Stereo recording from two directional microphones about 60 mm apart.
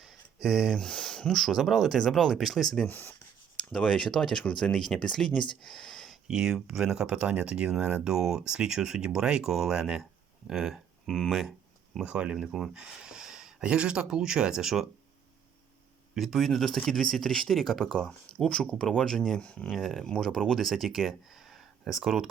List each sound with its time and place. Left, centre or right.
0.0 s a sound: centre
0.8 s speech: centre
2.8 s speech: left
3.6 s speech: centre
6.1 s speech: centre
12.0 s speech: centre
16.1 s speech: centre
19.7 s speech: centre